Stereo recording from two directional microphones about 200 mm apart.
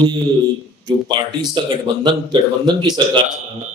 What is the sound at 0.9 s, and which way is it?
Speech, 20° right (ahead or behind).